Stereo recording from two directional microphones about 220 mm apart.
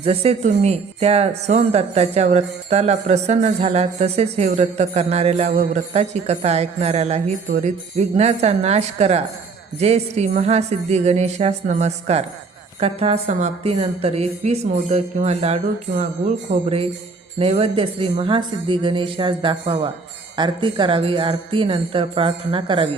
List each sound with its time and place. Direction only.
0.0 s speech: 25° right (ahead or behind)
9.8 s music: 30° right (ahead or behind)
12.8 s speech: 30° right (ahead or behind)